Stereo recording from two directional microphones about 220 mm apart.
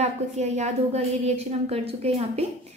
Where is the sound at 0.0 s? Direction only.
30° right (ahead or behind).